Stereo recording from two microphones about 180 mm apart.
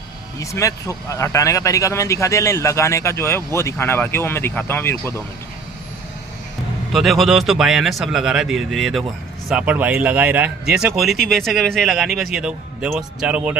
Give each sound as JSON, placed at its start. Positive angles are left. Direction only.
{"t": 0.4, "sound": "speech", "side_deg": 15}
{"t": 6.9, "sound": "speech", "side_deg": 0}